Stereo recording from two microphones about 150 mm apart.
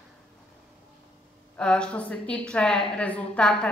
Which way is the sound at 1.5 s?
5° left (ahead or behind).